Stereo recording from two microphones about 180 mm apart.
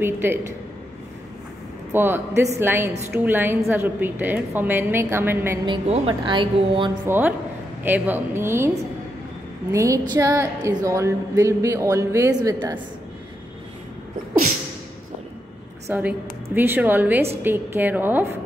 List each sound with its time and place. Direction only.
0.0 s a woman's voice: 10° right (ahead or behind)
1.9 s a woman's voice: 10° right (ahead or behind)
5.7 s speech: 35° right (ahead or behind)
7.1 s a woman's voice: 10° right (ahead or behind)
15.9 s a woman's voice: 10° right (ahead or behind)